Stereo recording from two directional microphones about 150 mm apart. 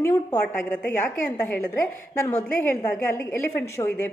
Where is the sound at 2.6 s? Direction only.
20° left (ahead or behind).